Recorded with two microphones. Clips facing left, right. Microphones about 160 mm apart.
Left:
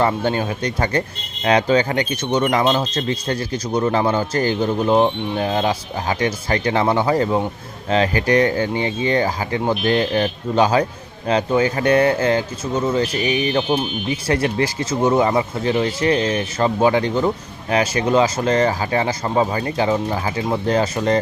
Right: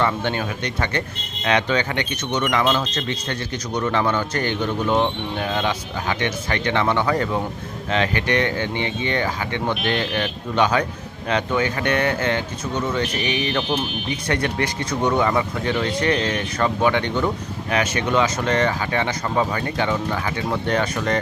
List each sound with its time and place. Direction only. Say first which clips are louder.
0.0 s speech: left 3 dB; 35° left (ahead or behind)